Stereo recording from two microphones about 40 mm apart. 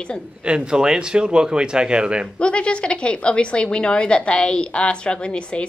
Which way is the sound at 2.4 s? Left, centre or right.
Left.